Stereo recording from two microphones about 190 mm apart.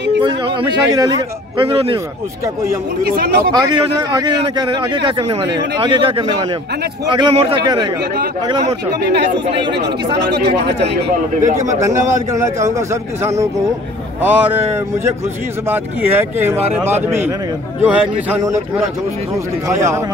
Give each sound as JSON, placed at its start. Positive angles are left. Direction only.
{"t": 0.5, "sound": "speech", "side_deg": -25}
{"t": 2.4, "sound": "a man's voice", "side_deg": -15}
{"t": 3.0, "sound": "speech", "side_deg": -55}
{"t": 3.5, "sound": "speech", "side_deg": -20}
{"t": 9.1, "sound": "speech", "side_deg": -65}
{"t": 11.8, "sound": "a man's voice", "side_deg": -15}
{"t": 15.7, "sound": "a man's voice", "side_deg": -10}
{"t": 17.8, "sound": "a man's voice", "side_deg": -15}
{"t": 19.7, "sound": "a man's voice", "side_deg": -15}